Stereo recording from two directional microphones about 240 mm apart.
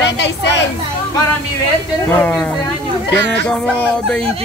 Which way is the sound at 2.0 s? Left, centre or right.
Centre.